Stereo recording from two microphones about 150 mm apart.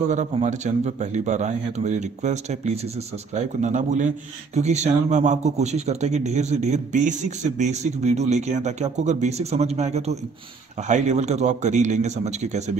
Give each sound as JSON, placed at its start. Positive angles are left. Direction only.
{"t": 0.1, "sound": "speech", "side_deg": -50}